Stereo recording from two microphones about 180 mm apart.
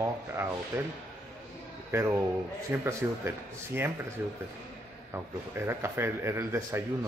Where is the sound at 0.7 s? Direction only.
15° right (ahead or behind).